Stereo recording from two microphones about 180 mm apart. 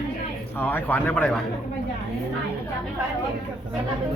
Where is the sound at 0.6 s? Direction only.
10° left (ahead or behind).